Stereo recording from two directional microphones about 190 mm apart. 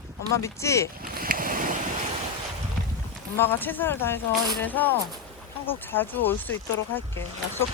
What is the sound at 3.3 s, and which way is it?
Speech, 10° left (ahead or behind).